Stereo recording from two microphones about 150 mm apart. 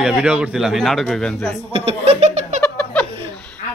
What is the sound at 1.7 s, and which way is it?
Speech, 40° right (ahead or behind).